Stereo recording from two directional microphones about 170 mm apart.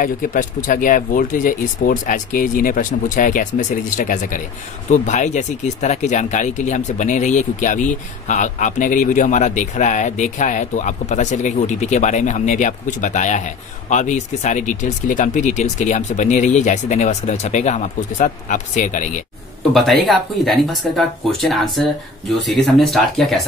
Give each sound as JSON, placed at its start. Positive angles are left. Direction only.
{"t": 0.0, "sound": "speech", "side_deg": 50}
{"t": 19.7, "sound": "speech", "side_deg": 0}